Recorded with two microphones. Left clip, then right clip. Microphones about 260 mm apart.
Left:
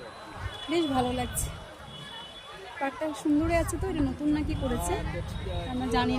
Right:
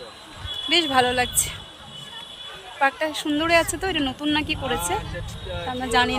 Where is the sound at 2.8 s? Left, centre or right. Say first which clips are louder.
Right 8 dB; centre.